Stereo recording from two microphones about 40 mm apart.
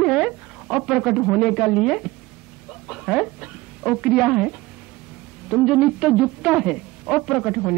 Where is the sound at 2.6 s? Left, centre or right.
Centre.